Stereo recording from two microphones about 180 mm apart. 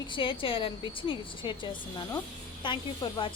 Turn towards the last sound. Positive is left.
turn(degrees=25)  # may be behind; listen again after turning